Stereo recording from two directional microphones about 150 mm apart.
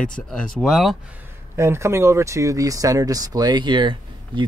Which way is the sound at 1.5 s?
20° right (ahead or behind).